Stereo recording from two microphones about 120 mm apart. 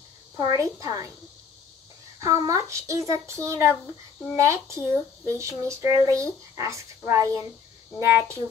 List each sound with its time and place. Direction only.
0.4 s speech: 30° right (ahead or behind)
2.1 s speech: 30° right (ahead or behind)